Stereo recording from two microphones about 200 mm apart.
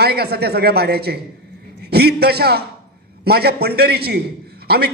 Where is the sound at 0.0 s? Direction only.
55° right (ahead or behind).